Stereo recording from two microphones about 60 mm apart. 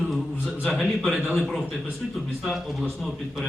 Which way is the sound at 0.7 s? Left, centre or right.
Centre.